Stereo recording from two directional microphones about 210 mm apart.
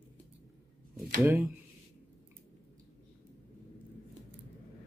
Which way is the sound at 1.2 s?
10° right (ahead or behind).